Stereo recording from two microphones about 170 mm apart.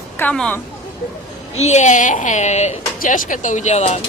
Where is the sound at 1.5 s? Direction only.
45° left (ahead or behind).